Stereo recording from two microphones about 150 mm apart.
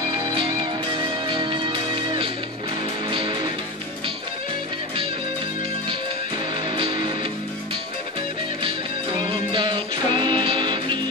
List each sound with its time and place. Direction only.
0.1 s music: 30° right (ahead or behind)
6.8 s music: 30° right (ahead or behind)
9.2 s music: 35° right (ahead or behind)